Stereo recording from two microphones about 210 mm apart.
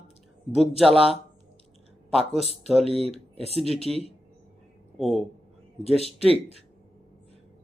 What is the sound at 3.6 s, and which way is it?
Speech, centre (ahead or behind).